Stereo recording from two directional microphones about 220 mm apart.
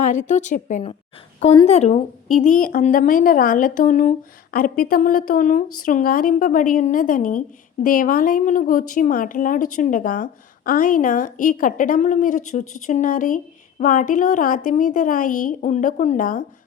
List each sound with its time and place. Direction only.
0.0 s a woman's voice: 35° left (ahead or behind)